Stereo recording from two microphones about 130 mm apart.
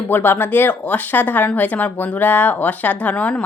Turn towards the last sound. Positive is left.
turn(degrees=10)  # may be behind; listen again after turning